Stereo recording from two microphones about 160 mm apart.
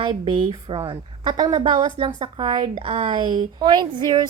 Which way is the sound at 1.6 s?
35° right (ahead or behind).